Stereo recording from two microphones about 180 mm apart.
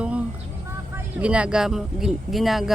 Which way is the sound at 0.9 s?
5° right (ahead or behind).